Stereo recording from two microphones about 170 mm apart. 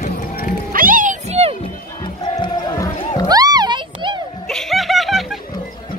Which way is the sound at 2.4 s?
20° left (ahead or behind).